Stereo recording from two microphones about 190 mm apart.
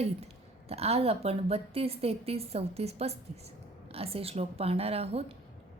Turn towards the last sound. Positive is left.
turn(degrees=-30)  # may be behind; listen again after turning